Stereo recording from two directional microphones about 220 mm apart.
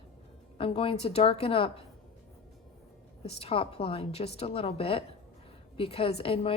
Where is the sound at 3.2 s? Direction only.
25° left (ahead or behind).